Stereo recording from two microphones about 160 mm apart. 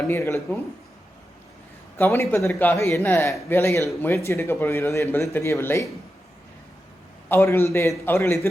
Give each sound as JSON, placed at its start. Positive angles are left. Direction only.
{"t": 0.1, "sound": "speech", "side_deg": 15}
{"t": 2.0, "sound": "speech", "side_deg": 15}
{"t": 7.3, "sound": "speech", "side_deg": 15}